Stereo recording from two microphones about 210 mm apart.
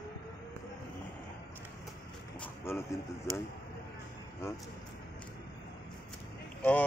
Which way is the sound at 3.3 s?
15° right (ahead or behind).